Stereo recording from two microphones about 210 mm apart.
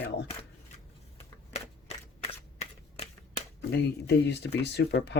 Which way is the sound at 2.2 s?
30° left (ahead or behind).